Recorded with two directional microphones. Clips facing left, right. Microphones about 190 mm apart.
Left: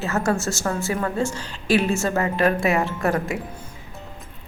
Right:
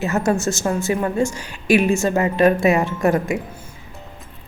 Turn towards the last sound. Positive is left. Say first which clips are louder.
# right 4 dB
turn(degrees=-20)  # may be behind; listen again after turning